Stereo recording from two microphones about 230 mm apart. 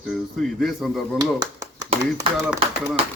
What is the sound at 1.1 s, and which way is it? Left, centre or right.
Speech, centre.